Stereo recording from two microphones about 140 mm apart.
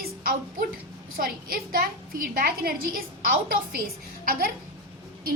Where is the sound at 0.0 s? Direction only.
90° right.